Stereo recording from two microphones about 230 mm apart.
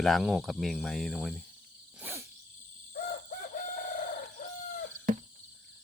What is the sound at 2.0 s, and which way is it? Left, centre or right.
Dog, centre.